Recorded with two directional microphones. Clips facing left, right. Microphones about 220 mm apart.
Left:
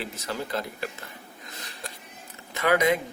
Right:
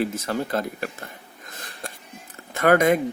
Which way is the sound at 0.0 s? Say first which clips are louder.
Right 8 dB; 50° right (ahead or behind).